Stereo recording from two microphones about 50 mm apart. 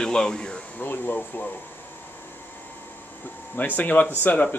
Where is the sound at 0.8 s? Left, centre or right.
Left.